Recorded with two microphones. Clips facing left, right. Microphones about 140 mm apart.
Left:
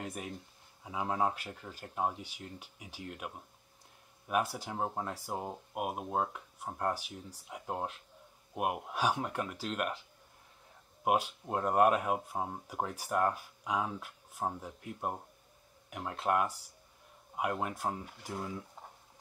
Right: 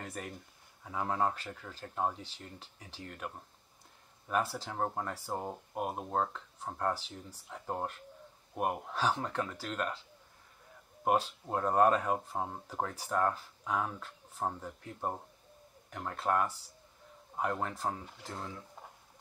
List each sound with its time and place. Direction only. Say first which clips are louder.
0.0 s speech: left 2 dB; 15° left (ahead or behind)
11.1 s speech: even; 10° left (ahead or behind)